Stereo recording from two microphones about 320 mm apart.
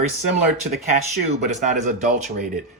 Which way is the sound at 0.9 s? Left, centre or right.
Right.